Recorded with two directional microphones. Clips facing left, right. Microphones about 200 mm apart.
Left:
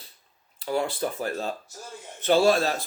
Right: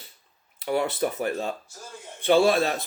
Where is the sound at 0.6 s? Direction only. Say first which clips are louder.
Right 2 dB; 20° right (ahead or behind).